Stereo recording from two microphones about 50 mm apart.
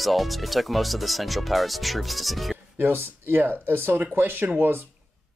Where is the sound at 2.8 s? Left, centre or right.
Right.